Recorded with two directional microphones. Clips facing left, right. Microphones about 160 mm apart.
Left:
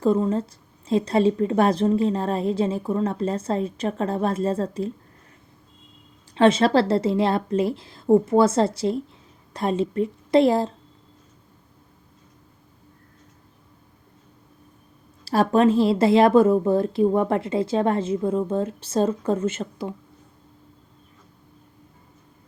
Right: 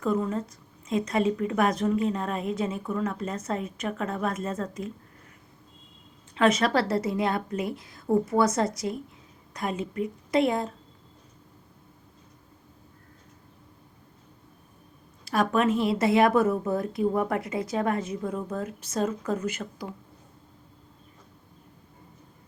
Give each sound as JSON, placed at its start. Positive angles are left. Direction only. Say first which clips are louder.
{"t": 0.0, "sound": "a woman's voice", "louder": "left 6 dB", "side_deg": 30}
{"t": 6.3, "sound": "a woman's voice", "louder": "left 6 dB", "side_deg": 30}
{"t": 15.2, "sound": "a woman's voice", "louder": "left 6 dB", "side_deg": 30}